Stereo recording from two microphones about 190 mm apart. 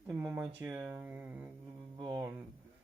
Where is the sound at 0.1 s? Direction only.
10° right (ahead or behind).